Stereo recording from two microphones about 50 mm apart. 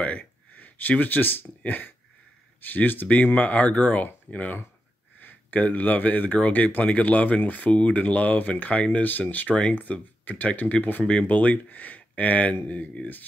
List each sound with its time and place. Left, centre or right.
0.2 s speech: left
3.3 s speech: left